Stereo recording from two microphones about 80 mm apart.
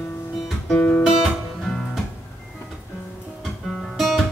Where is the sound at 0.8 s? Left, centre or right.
Left.